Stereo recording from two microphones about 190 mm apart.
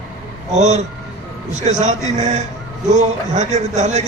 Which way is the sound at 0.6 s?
40° right (ahead or behind).